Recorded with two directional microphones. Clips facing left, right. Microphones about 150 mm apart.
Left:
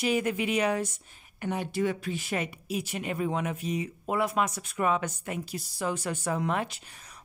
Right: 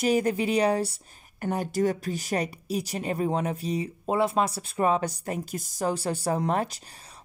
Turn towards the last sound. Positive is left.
turn(degrees=-35)  # may be behind; listen again after turning